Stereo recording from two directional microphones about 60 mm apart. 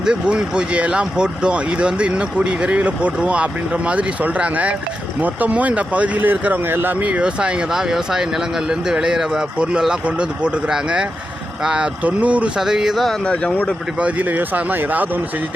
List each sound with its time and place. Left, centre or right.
0.0 s speech: centre; by 7.1 s right
7.1 s speech: centre
12.5 s speech: centre
13.2 s speech: centre
14.0 s speech: right